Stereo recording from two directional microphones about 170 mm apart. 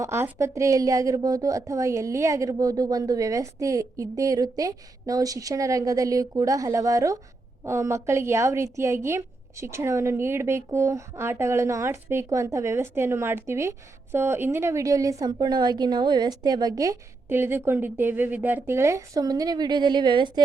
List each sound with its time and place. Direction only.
0.0 s a woman's voice: 15° right (ahead or behind)